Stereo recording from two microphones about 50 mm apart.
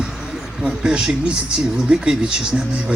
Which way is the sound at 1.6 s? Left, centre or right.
Centre.